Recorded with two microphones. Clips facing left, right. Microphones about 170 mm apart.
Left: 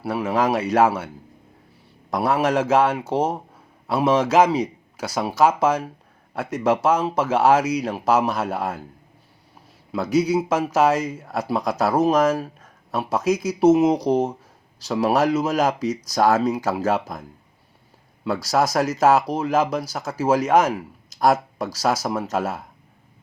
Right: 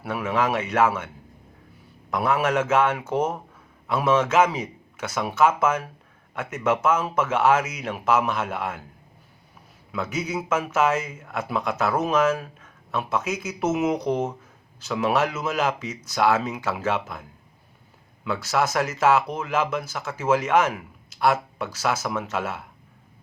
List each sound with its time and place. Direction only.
0.0 s speech: 35° left (ahead or behind)
9.9 s speech: 35° left (ahead or behind)
18.3 s speech: 40° left (ahead or behind)